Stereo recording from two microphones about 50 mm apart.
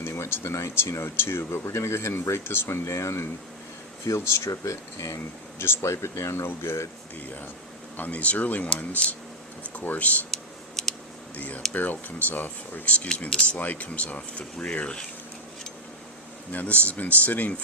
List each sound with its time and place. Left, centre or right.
0.0 s a sound: left
1.0 s speech: left
7.9 s speech: left
10.3 s a sound: centre
11.3 s speech: left
16.5 s speech: left